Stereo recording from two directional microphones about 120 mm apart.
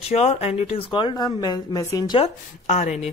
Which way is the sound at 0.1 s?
60° left (ahead or behind).